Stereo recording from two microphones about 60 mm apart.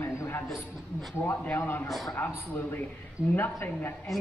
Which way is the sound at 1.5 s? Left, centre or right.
Left.